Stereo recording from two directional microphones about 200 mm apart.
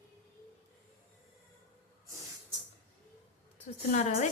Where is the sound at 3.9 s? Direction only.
35° left (ahead or behind).